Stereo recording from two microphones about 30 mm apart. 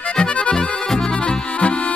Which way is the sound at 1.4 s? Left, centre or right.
Left.